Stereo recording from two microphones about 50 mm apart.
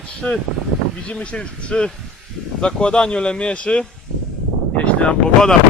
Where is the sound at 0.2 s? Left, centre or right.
Left.